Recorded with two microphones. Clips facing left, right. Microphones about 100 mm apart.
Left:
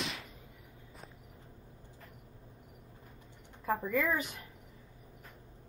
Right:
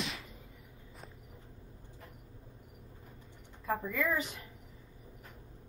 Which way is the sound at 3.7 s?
35° left (ahead or behind).